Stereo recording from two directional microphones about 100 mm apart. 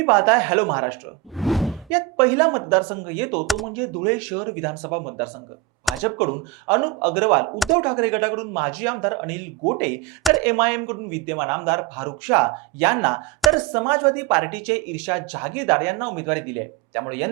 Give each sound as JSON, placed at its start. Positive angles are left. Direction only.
{"t": 0.0, "sound": "speech", "side_deg": -15}
{"t": 1.4, "sound": "a sound", "side_deg": 0}
{"t": 1.9, "sound": "speech", "side_deg": -15}
{"t": 3.4, "sound": "speech", "side_deg": 0}
{"t": 3.8, "sound": "speech", "side_deg": -20}